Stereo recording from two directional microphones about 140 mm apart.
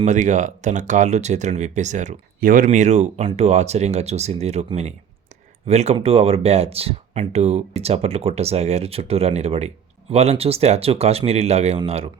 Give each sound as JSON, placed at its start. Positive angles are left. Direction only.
{"t": 0.0, "sound": "speech", "side_deg": -60}
{"t": 2.6, "sound": "speech", "side_deg": -55}